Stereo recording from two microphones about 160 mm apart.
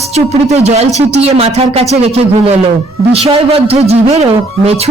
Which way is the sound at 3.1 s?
40° right (ahead or behind).